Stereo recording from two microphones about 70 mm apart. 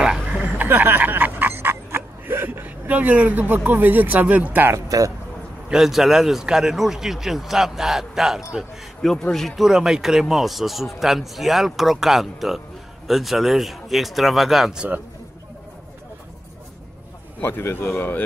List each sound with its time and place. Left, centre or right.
0.2 s a sound: centre
4.7 s speech: right
5.7 s a man's voice: centre
9.0 s a man's voice: centre
9.7 s a man's voice: centre
17.4 s speech: left